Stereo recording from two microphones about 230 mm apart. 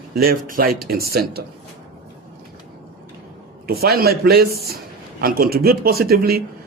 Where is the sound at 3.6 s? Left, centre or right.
Right.